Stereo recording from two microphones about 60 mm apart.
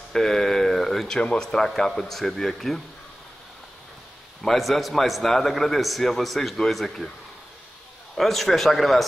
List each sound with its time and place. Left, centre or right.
0.1 s speech: centre
4.4 s a man's voice: centre
8.2 s a man's voice: centre